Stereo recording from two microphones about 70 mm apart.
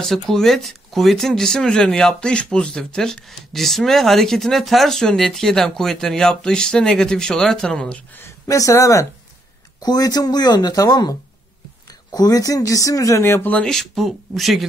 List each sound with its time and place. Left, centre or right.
0.0 s speech: centre
8.5 s speech: left
9.8 s speech: left
13.2 s speech: left
13.7 s speech: centre